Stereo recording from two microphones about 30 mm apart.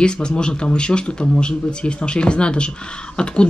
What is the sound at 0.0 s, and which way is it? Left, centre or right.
Speech, left.